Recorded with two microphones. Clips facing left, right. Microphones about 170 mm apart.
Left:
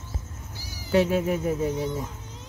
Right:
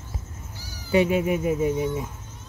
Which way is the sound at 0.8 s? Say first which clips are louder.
Right 1 dB; 10° right (ahead or behind).